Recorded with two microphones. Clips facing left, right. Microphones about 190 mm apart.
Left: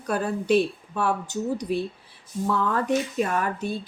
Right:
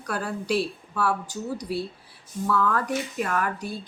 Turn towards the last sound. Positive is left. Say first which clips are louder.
# left 2 dB
turn(degrees=25)  # may be behind; listen again after turning